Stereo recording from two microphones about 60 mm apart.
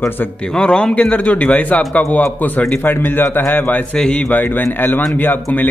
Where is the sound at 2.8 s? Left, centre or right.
Left.